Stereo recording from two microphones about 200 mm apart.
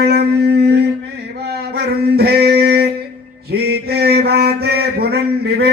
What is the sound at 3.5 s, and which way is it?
Mantra, 55° right (ahead or behind).